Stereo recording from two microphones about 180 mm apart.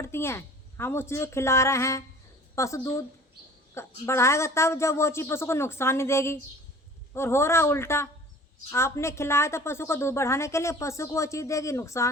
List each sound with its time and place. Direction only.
0.0 s a woman's voice: 15° left (ahead or behind)